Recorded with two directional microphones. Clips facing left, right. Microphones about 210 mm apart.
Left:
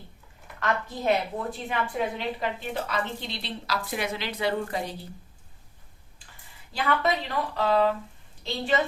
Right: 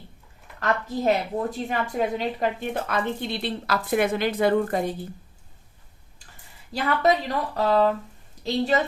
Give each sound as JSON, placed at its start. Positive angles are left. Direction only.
{"t": 0.6, "sound": "a woman's voice", "side_deg": -40}
{"t": 6.7, "sound": "speech", "side_deg": -40}